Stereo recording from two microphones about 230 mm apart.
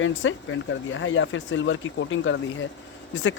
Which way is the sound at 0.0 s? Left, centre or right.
Left.